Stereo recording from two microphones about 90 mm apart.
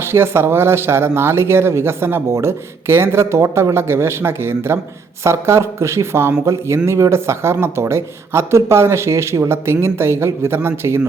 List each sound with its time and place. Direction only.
0.0 s speech: 25° right (ahead or behind)